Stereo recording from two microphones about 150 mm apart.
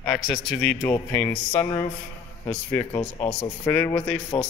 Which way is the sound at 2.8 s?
10° left (ahead or behind).